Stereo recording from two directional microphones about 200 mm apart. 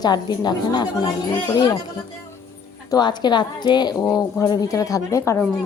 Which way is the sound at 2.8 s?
20° left (ahead or behind).